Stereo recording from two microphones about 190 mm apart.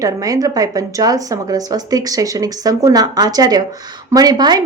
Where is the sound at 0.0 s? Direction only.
20° right (ahead or behind).